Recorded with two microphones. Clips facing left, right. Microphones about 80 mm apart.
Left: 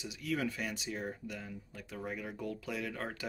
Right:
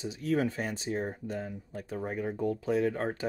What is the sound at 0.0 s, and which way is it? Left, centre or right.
Speech, right.